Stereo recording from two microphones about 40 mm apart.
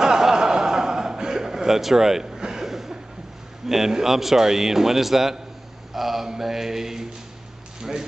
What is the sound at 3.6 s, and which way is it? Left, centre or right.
A man's voice, centre.